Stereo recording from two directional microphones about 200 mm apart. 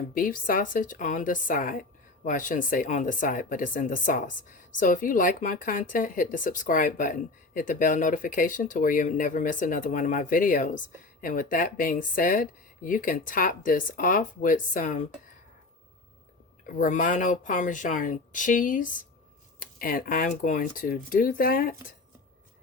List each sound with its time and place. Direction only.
0.2 s speech: 45° left (ahead or behind)
16.6 s speech: 40° left (ahead or behind)